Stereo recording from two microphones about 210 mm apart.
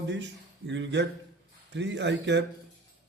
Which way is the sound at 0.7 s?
55° right (ahead or behind).